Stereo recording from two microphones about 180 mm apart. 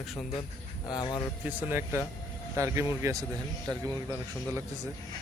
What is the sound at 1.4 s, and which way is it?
Speech, 10° right (ahead or behind).